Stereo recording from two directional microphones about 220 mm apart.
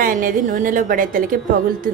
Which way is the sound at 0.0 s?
40° right (ahead or behind).